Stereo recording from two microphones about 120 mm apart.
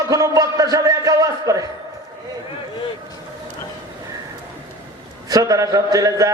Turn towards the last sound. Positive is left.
turn(degrees=-25)  # may be behind; listen again after turning